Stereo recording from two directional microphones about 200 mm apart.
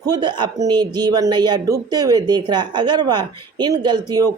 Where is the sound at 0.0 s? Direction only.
20° right (ahead or behind).